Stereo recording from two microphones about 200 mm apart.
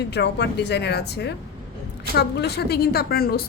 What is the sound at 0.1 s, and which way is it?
A woman's voice, 60° left (ahead or behind).